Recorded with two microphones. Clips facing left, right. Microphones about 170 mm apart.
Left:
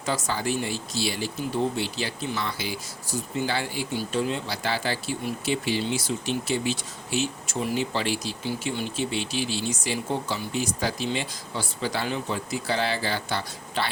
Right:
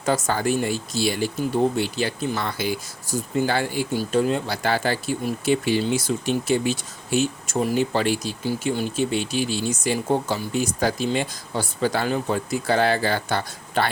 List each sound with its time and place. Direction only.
0.0 s speech: 50° right (ahead or behind)